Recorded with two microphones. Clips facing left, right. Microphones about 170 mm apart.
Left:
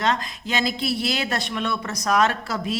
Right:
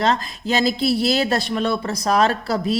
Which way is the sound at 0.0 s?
35° right (ahead or behind).